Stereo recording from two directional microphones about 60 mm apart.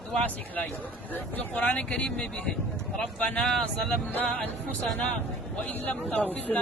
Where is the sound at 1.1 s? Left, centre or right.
Left.